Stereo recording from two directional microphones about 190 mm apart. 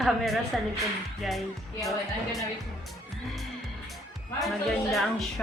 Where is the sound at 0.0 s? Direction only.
Centre (ahead or behind).